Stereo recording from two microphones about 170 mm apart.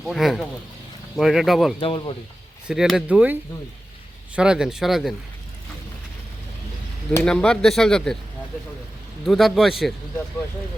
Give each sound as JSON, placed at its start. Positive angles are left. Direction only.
{"t": 0.0, "sound": "speech", "side_deg": 0}
{"t": 1.8, "sound": "speech", "side_deg": 30}
{"t": 2.6, "sound": "speech", "side_deg": -5}
{"t": 4.4, "sound": "speech", "side_deg": -5}
{"t": 7.2, "sound": "speech", "side_deg": 5}
{"t": 9.2, "sound": "speech", "side_deg": 0}